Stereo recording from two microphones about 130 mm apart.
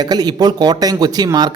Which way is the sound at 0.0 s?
30° right (ahead or behind).